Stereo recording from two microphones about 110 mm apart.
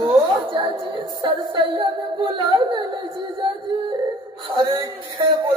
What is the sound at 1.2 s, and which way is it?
A woman's voice, 50° right (ahead or behind).